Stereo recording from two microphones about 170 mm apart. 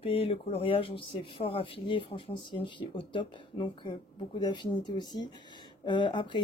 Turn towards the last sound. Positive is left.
turn(degrees=30)  # may be behind; listen again after turning